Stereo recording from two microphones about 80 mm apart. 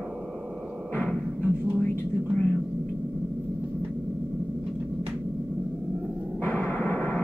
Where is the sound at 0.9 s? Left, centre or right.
Centre.